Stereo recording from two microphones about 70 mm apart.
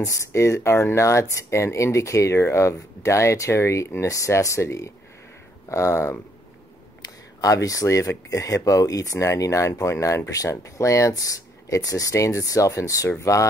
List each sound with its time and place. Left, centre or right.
0.0 s speech: left
7.4 s speech: left